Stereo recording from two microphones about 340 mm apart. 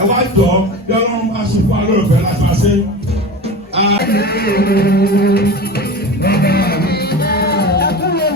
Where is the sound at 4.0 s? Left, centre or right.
Left.